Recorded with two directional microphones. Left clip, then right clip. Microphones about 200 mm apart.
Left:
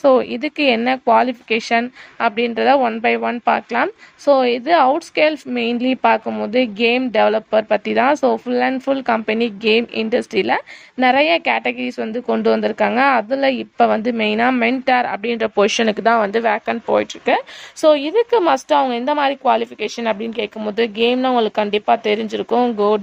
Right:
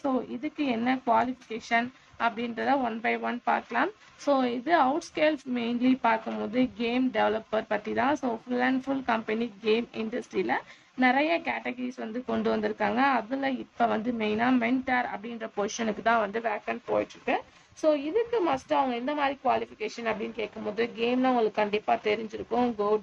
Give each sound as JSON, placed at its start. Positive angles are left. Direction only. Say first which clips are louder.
{"t": 0.0, "sound": "speech", "louder": "left 16 dB", "side_deg": 50}